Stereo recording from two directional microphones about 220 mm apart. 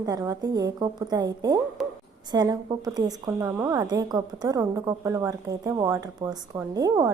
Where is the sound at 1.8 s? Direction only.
Centre (ahead or behind).